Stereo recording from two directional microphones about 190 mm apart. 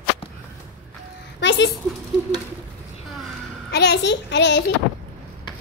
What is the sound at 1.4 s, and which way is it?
Speech, 65° left (ahead or behind).